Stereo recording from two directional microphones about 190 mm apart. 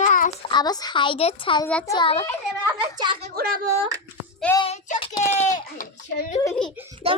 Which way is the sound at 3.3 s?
50° right (ahead or behind).